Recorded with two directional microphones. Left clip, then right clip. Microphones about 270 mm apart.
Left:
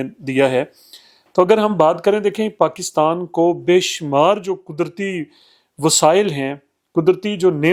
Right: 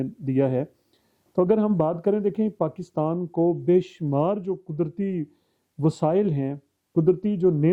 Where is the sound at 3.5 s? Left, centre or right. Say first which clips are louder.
Left 5 dB; centre.